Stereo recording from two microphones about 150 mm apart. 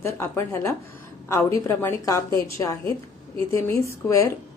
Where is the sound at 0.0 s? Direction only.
15° left (ahead or behind).